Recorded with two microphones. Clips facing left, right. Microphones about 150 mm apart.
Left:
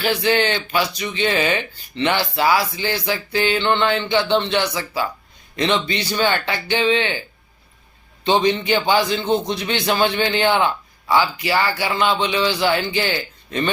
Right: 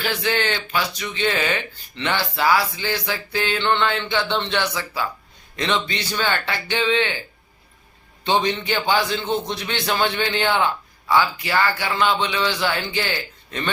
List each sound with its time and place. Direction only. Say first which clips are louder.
0.0 s a man's voice: left 5 dB; 15° left (ahead or behind)
8.2 s a man's voice: left 3 dB; 15° left (ahead or behind)